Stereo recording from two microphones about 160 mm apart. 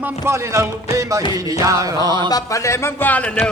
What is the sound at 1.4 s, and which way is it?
Music, 20° right (ahead or behind).